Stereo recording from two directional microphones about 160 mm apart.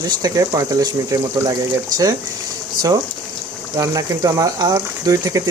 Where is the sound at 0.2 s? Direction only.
25° right (ahead or behind).